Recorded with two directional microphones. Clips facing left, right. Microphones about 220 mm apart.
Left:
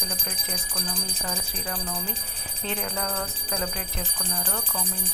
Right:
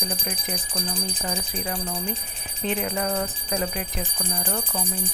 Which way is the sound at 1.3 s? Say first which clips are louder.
Right 3 dB; 20° right (ahead or behind).